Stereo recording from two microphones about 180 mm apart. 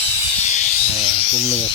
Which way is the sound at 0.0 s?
40° left (ahead or behind).